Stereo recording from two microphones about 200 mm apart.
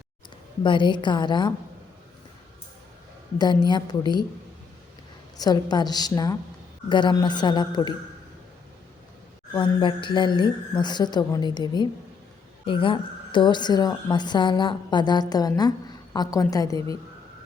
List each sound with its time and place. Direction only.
0.6 s a woman's voice: 25° left (ahead or behind)
3.3 s a woman's voice: 20° left (ahead or behind)
5.4 s a woman's voice: 20° left (ahead or behind)
9.5 s a woman's voice: 25° left (ahead or behind)